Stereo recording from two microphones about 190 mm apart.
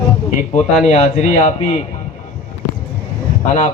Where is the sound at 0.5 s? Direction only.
35° left (ahead or behind).